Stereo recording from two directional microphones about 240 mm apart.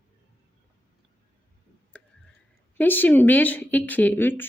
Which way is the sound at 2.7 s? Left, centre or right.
Centre.